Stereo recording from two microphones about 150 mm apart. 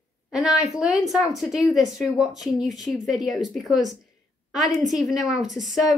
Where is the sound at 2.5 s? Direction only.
25° left (ahead or behind).